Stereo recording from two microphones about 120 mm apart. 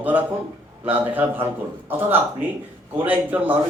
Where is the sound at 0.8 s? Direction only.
15° right (ahead or behind).